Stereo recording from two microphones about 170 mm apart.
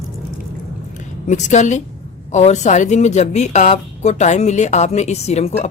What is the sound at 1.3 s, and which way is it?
A woman's voice, 45° left (ahead or behind).